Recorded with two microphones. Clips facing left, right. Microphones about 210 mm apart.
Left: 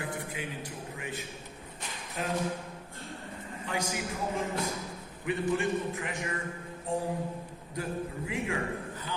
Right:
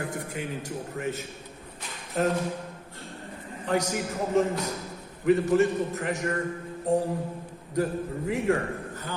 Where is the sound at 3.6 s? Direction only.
40° right (ahead or behind).